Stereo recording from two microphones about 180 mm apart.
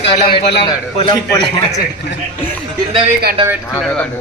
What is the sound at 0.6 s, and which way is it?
Speech, 25° left (ahead or behind).